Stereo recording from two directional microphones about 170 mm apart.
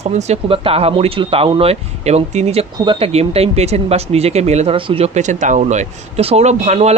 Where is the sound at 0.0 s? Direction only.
40° right (ahead or behind).